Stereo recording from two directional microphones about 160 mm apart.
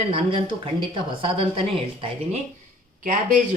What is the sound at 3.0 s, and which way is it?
Speech, 50° right (ahead or behind).